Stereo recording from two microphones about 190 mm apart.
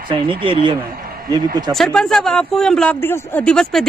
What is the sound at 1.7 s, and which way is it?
Speech, 5° left (ahead or behind).